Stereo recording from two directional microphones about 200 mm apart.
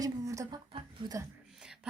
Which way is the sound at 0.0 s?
15° right (ahead or behind).